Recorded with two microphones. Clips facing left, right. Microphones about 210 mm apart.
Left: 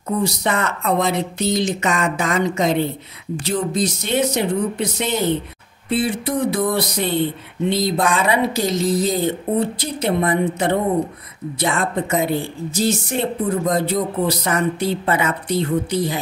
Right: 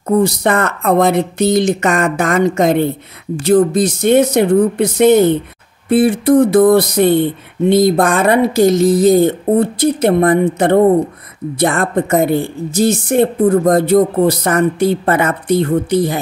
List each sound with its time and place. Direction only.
0.0 s speech: 50° right (ahead or behind)